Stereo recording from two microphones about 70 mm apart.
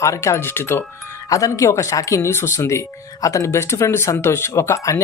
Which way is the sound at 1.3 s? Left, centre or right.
Left.